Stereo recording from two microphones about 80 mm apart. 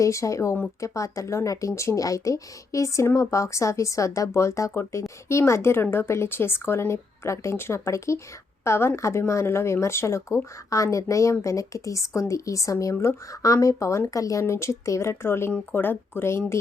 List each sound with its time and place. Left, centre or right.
0.0 s speech: left